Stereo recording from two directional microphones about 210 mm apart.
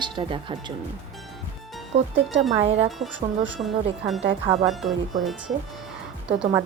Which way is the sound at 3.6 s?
30° right (ahead or behind).